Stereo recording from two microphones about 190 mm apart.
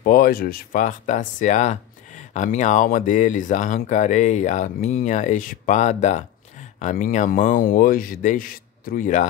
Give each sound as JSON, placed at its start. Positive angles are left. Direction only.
{"t": 0.0, "sound": "speech", "side_deg": 50}